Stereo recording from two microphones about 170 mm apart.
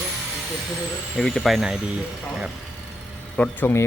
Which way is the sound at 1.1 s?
Centre (ahead or behind).